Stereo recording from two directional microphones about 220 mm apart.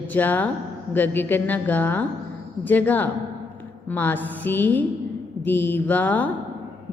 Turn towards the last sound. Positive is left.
turn(degrees=5)  # may be behind; listen again after turning